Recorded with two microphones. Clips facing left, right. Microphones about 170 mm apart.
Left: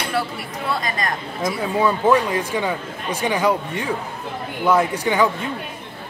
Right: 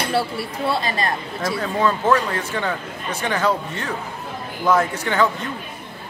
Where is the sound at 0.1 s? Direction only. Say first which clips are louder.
Right 2 dB; 30° right (ahead or behind).